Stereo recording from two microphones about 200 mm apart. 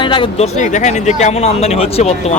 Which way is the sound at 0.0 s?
25° left (ahead or behind).